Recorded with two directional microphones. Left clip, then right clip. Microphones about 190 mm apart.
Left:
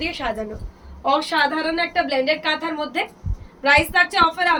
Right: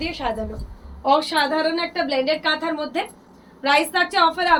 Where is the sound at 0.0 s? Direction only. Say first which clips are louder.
Even; 20° left (ahead or behind).